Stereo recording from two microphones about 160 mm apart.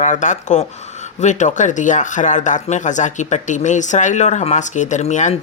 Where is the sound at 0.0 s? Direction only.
50° left (ahead or behind).